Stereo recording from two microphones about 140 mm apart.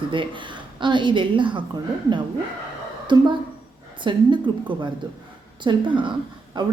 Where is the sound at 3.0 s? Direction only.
35° right (ahead or behind).